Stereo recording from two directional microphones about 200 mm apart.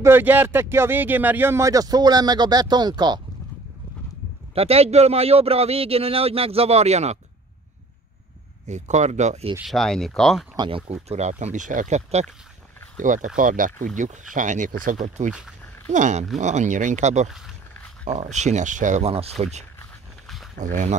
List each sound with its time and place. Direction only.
0.0 s speech: 10° right (ahead or behind)
4.6 s speech: 30° right (ahead or behind)
8.6 s speech: 35° right (ahead or behind)
9.7 s speech: centre (ahead or behind)
10.5 s speech: 20° right (ahead or behind)
10.9 s speech: 35° right (ahead or behind)